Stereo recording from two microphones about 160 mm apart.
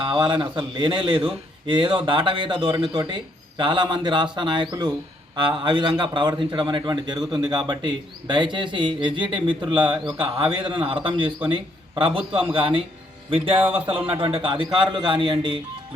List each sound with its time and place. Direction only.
0.0 s a man's voice: 30° right (ahead or behind)